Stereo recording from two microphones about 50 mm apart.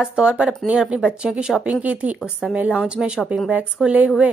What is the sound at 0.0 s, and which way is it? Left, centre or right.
A woman's voice, right.